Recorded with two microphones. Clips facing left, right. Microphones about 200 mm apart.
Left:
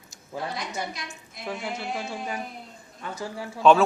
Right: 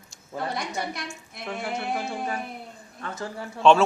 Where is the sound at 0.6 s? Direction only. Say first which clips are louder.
Right 2 dB; 55° right (ahead or behind).